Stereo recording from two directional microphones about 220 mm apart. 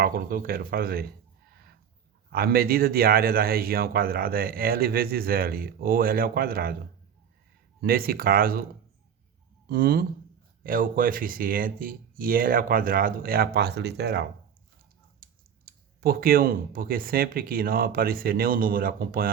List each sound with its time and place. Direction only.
0.0 s speech: 40° right (ahead or behind)
2.3 s speech: 45° right (ahead or behind)
7.8 s speech: 40° right (ahead or behind)
9.6 s speech: 45° right (ahead or behind)